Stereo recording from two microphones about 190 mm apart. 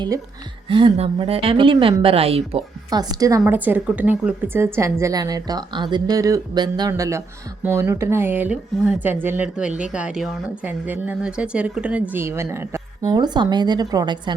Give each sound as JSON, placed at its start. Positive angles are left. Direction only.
{"t": 0.7, "sound": "a woman's voice", "side_deg": -25}